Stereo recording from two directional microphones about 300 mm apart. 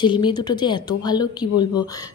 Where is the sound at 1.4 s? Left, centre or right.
Left.